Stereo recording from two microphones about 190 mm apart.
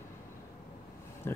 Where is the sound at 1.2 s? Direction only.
10° left (ahead or behind).